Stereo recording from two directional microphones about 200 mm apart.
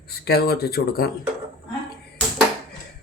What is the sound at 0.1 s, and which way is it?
Speech, 50° left (ahead or behind).